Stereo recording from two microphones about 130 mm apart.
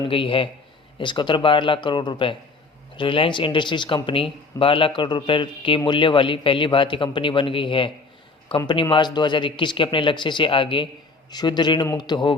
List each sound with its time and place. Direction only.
0.1 s a man's voice: 45° left (ahead or behind)